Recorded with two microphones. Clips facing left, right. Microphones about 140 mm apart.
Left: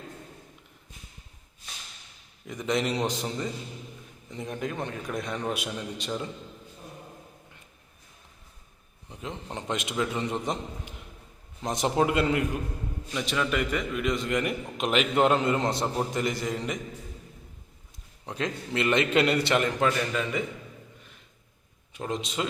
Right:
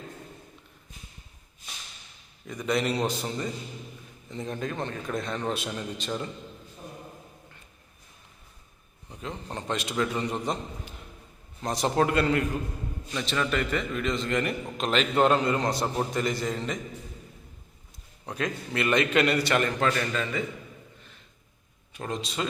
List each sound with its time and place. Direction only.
2.5 s a man's voice: 20° left (ahead or behind)
9.5 s a man's voice: 20° left (ahead or behind)
18.3 s a man's voice: 20° left (ahead or behind)
19.6 s a man's voice: 10° left (ahead or behind)
21.9 s a man's voice: 20° left (ahead or behind)